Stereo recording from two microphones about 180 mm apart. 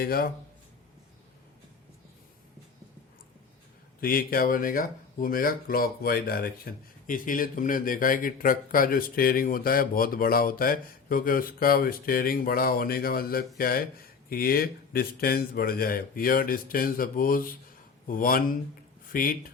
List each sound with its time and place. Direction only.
0.0 s speech: 55° left (ahead or behind)
4.0 s speech: 55° left (ahead or behind)